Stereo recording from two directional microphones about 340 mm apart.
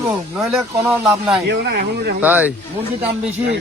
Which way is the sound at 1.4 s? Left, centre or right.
Right.